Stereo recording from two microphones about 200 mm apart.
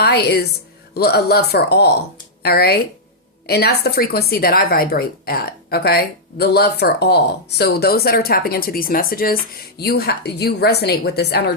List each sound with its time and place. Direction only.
0.0 s speech: 55° left (ahead or behind)